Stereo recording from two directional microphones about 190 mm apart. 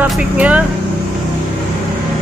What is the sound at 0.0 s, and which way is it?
Speech, 5° right (ahead or behind).